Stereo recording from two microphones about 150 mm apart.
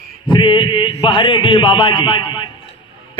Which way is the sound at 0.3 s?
30° left (ahead or behind).